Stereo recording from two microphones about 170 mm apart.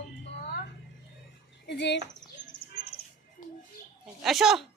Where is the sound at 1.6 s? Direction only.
85° left.